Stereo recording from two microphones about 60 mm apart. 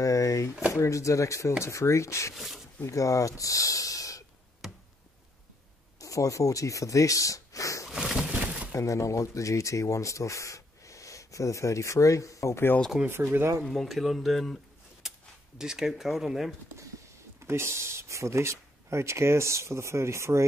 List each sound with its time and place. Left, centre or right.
0.0 s a sound: left
0.7 s speech: left
2.3 s speech: centre
2.9 s speech: left
4.6 s chop: centre
5.9 s speech: left
7.8 s a sound: centre
8.3 s a sound: right
8.7 s speech: left
13.0 s speech: right
13.7 s speech: centre
15.0 s speech: centre
17.5 s speech: right